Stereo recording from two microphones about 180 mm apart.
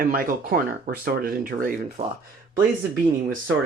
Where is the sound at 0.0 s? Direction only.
50° right (ahead or behind).